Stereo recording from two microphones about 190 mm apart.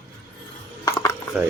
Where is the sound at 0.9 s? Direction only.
15° left (ahead or behind).